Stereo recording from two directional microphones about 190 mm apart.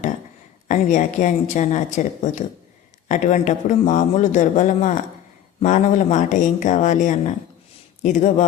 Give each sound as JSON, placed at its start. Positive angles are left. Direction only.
{"t": 0.7, "sound": "speech", "side_deg": 40}